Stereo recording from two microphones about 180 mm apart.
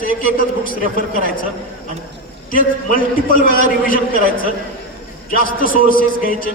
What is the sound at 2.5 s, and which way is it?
A man's voice, 50° left (ahead or behind).